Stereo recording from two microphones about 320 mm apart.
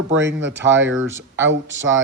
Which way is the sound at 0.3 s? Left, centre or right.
Right.